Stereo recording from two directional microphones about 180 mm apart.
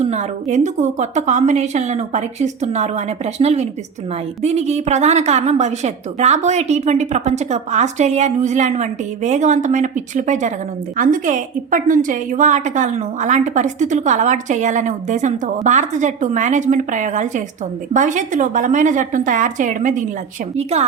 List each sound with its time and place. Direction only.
0.0 s a woman's voice: 40° right (ahead or behind)